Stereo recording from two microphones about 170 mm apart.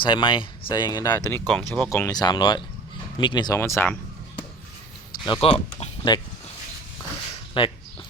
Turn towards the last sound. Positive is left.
turn(degrees=30)  # may be behind; listen again after turning